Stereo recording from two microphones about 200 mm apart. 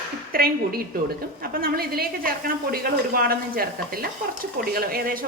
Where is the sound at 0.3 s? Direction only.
50° right (ahead or behind).